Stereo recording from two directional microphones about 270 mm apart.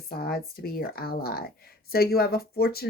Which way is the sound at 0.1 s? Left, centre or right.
Left.